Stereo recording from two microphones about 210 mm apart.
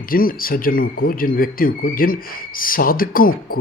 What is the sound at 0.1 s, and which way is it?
Speech, 45° left (ahead or behind).